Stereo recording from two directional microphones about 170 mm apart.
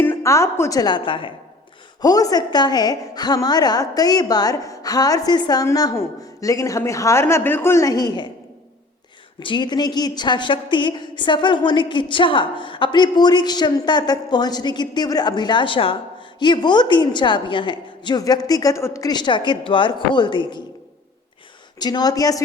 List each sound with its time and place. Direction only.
0.0 s a woman's voice: 15° left (ahead or behind)
9.4 s a woman's voice: 30° left (ahead or behind)
21.8 s a woman's voice: 25° left (ahead or behind)